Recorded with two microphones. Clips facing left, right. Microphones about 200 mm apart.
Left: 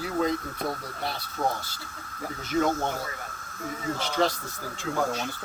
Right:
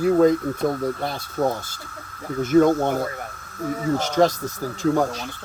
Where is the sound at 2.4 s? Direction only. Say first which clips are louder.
Right 10 dB; 50° right (ahead or behind).